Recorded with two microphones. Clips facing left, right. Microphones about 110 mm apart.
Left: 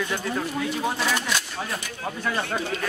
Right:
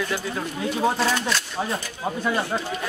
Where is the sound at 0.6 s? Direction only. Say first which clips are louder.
Right 8 dB; 30° right (ahead or behind).